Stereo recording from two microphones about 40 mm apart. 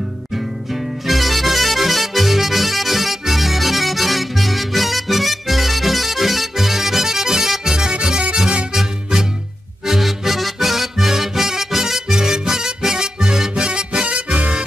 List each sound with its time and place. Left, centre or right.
0.3 s music: centre
9.8 s music: centre
14.0 s music: right